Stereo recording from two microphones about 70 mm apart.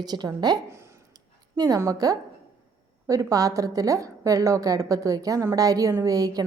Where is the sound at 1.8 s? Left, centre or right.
Right.